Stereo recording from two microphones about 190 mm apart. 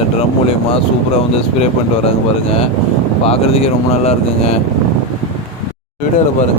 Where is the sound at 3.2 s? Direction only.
30° left (ahead or behind).